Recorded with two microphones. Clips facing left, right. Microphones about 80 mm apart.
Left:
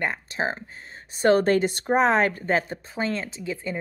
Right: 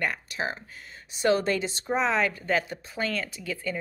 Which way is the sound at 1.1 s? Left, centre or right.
Left.